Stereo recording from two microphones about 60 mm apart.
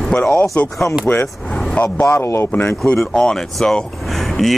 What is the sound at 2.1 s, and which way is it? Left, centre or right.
Speech, left.